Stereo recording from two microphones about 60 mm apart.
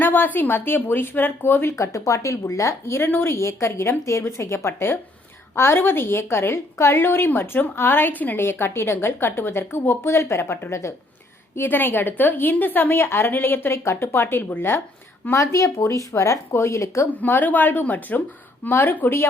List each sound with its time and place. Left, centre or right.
0.0 s a woman's voice: left
1.7 s speech: left
3.1 s a woman's voice: left
3.3 s a woman's voice: left
8.4 s a woman's voice: left
11.5 s a woman's voice: left
15.4 s speech: left
17.2 s a woman's voice: left